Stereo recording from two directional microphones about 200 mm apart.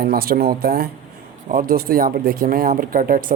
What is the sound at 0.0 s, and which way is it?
Speech, 50° right (ahead or behind).